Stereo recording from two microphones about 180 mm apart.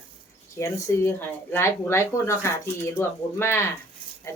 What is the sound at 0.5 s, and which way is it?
Speech, 15° left (ahead or behind).